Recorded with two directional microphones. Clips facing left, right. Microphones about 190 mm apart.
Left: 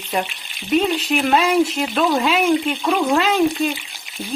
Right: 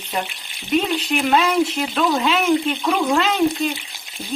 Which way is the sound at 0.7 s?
5° left (ahead or behind).